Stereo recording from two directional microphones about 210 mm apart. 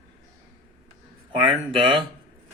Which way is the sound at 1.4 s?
25° right (ahead or behind).